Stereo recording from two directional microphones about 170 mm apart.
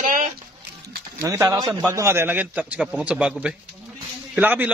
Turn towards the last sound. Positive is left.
turn(degrees=-10)  # may be behind; listen again after turning